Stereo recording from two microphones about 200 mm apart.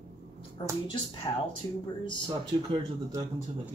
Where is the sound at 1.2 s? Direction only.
20° left (ahead or behind).